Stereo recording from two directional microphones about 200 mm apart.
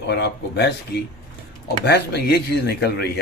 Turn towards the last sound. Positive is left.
turn(degrees=55)  # may be behind; listen again after turning